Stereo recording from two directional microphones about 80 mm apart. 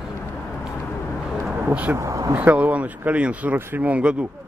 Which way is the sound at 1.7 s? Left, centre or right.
Centre.